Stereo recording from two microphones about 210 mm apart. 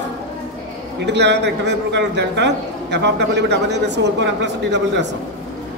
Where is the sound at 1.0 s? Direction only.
55° right (ahead or behind).